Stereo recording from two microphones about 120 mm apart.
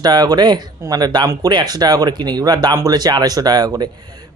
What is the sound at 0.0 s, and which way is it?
Speech, 35° right (ahead or behind).